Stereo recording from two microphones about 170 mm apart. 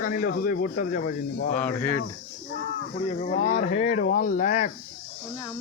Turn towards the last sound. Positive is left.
turn(degrees=45)  # may be behind; listen again after turning